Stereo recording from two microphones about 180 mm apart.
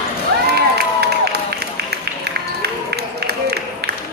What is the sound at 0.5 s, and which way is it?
Crowd, 65° right (ahead or behind).